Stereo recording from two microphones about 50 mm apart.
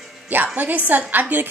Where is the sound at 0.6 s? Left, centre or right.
Right.